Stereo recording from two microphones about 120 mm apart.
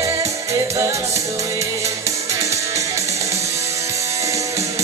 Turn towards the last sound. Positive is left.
turn(degrees=-25)  # may be behind; listen again after turning